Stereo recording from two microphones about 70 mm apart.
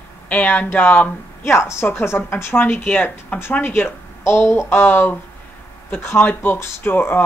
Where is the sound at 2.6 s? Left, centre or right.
Left.